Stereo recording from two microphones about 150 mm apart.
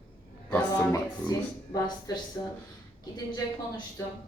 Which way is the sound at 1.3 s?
25° left (ahead or behind).